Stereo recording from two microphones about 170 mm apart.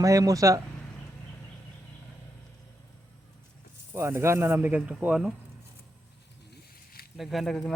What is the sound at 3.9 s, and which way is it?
Speech, 15° right (ahead or behind).